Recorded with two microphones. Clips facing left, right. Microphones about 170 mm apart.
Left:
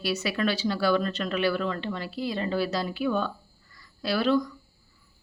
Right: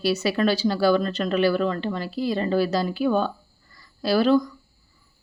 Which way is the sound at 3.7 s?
35° right (ahead or behind).